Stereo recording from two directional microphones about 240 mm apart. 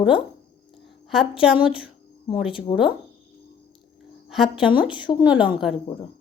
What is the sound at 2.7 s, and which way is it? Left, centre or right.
Speech, centre.